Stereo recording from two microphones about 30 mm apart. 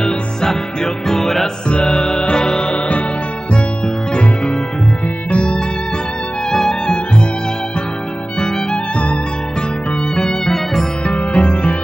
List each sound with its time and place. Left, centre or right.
1.0 s music: centre; by 4.2 s left
5.3 s music: left
6.5 s music: centre
8.9 s music: left
10.4 s music: centre
11.1 s music: left